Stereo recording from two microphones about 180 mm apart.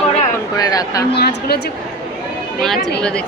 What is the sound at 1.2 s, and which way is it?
Speech, 60° left (ahead or behind).